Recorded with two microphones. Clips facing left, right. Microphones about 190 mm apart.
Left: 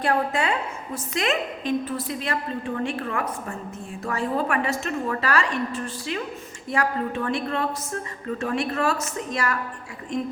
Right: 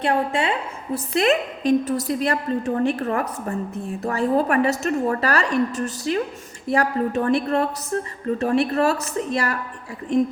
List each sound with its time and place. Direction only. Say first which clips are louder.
0.0 s a woman's voice: right 2 dB; 25° right (ahead or behind)
0.9 s a woman's voice: right 6 dB; 35° right (ahead or behind)